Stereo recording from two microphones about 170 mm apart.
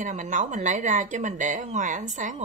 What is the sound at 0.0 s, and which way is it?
A woman's voice, 45° right (ahead or behind).